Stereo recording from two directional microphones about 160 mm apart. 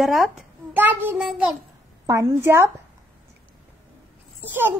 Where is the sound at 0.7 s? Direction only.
10° right (ahead or behind).